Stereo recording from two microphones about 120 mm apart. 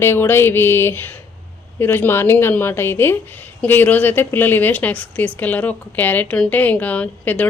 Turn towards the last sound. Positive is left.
turn(degrees=15)  # may be behind; listen again after turning